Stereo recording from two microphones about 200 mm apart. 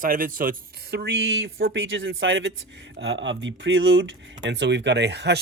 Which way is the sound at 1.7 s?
70° right (ahead or behind).